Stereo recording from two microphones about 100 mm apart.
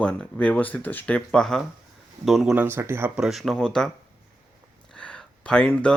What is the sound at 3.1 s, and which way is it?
Speech, 5° right (ahead or behind).